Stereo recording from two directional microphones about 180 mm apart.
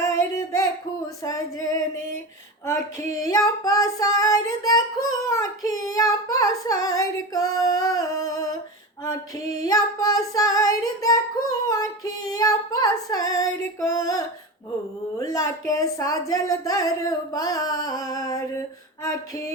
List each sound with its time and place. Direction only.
0.1 s child singing: 15° left (ahead or behind)
1.2 s female singing: 20° left (ahead or behind)
3.2 s female singing: 20° left (ahead or behind)
9.6 s female singing: 20° left (ahead or behind)
15.2 s speech: 20° left (ahead or behind)